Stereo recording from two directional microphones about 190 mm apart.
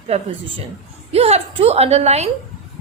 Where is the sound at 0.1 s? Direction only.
35° right (ahead or behind).